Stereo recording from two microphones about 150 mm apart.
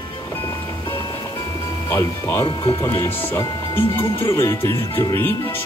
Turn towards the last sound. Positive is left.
turn(degrees=20)  # may be behind; listen again after turning